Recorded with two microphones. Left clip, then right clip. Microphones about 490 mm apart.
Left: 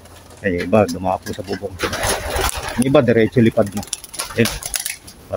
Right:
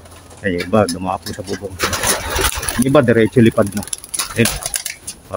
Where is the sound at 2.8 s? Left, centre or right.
Left.